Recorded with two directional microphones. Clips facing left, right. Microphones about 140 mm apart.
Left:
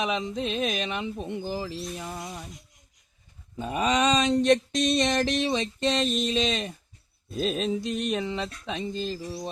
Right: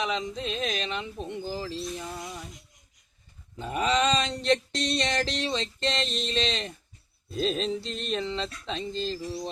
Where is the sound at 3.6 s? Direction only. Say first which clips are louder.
Left 1 dB; 15° left (ahead or behind).